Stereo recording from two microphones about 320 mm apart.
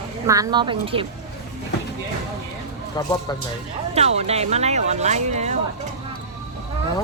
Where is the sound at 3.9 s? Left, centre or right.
Centre.